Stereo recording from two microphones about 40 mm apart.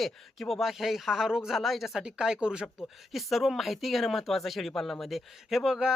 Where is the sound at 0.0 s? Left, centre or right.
Centre.